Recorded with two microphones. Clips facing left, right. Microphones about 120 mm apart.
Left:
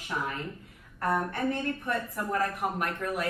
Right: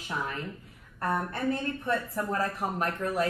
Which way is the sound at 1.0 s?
30° right (ahead or behind).